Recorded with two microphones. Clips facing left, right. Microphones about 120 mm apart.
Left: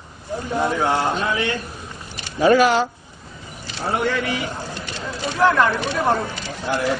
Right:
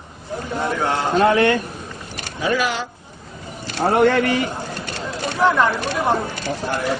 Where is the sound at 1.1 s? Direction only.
60° right (ahead or behind).